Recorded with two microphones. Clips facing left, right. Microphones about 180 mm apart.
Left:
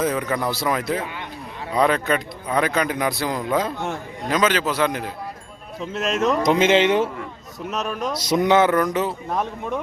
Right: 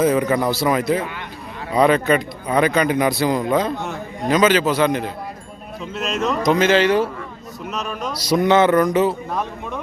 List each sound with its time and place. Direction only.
0.0 s a man's voice: 5° right (ahead or behind)
6.4 s speech: 25° left (ahead or behind)
7.8 s speech: 45° left (ahead or behind)
8.1 s speech: 20° left (ahead or behind)
8.5 s a man's voice: 5° left (ahead or behind)